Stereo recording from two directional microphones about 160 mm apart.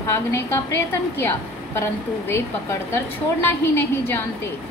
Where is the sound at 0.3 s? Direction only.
15° left (ahead or behind).